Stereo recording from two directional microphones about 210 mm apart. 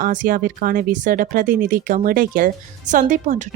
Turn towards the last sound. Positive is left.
turn(degrees=-35)  # may be behind; listen again after turning